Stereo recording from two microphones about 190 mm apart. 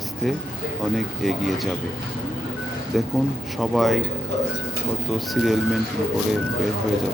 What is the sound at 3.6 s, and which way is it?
Speech, centre (ahead or behind).